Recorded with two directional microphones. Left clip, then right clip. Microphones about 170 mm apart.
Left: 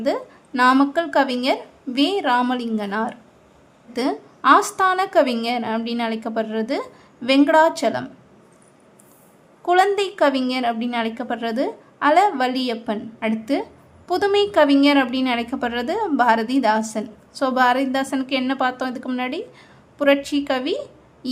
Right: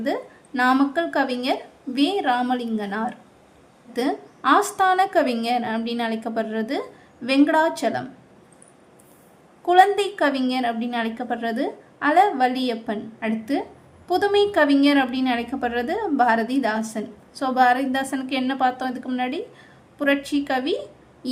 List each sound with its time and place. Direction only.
0.0 s a woman's voice: 20° left (ahead or behind)
9.6 s a woman's voice: 20° left (ahead or behind)